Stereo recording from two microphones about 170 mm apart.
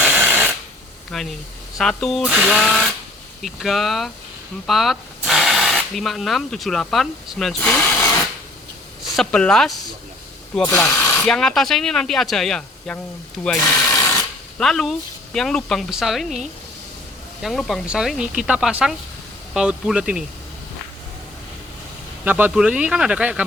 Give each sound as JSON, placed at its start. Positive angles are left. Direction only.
{"t": 0.0, "sound": "a sound", "side_deg": -10}
{"t": 1.1, "sound": "speech", "side_deg": 0}
{"t": 9.0, "sound": "speech", "side_deg": 5}
{"t": 22.2, "sound": "speech", "side_deg": -10}